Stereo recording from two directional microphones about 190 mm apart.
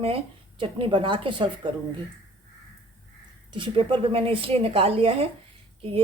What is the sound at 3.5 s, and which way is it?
A woman's voice, 25° right (ahead or behind).